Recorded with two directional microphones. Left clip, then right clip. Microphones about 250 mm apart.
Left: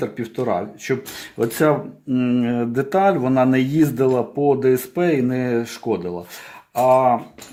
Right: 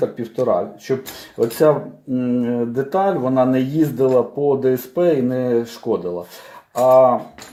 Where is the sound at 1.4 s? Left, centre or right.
Left.